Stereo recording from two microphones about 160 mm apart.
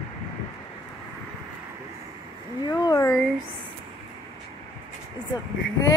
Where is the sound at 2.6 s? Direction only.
25° left (ahead or behind).